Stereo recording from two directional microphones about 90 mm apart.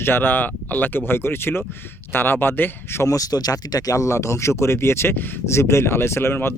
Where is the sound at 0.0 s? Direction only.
25° left (ahead or behind).